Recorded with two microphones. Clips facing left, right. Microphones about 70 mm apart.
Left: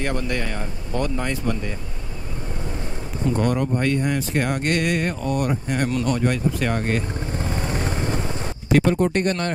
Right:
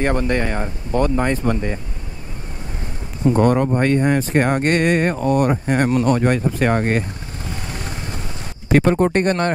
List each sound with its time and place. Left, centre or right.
0.0 s speech: right
3.3 s speech: right
7.3 s vehicle: left
8.7 s speech: right